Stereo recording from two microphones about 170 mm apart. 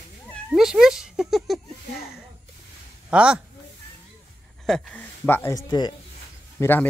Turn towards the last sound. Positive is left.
turn(degrees=10)  # may be behind; listen again after turning